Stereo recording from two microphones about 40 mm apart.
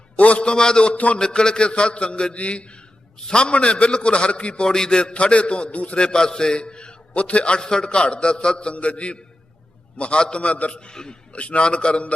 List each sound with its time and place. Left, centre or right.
0.2 s a sound: left
0.5 s a man's voice: centre
0.9 s a man's voice: left
1.2 s a man's voice: left
6.0 s a man's voice: left
11.3 s a man's voice: left